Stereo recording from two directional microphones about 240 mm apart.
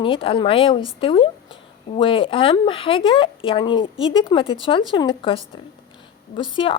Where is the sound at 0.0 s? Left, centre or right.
Left.